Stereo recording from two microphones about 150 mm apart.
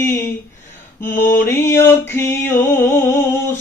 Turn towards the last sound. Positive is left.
turn(degrees=15)  # may be behind; listen again after turning